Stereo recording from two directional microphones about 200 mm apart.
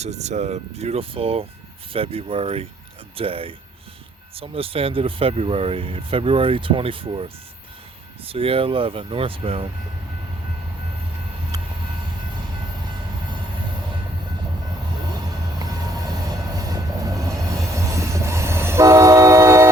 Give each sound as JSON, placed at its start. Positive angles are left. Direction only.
{"t": 0.0, "sound": "speech", "side_deg": -35}
{"t": 8.3, "sound": "speech", "side_deg": -25}
{"t": 15.5, "sound": "train", "side_deg": -20}